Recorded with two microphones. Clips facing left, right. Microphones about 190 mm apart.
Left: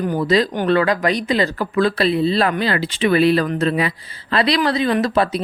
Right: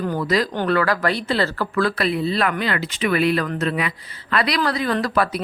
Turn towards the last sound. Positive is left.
turn(degrees=25)  # may be behind; listen again after turning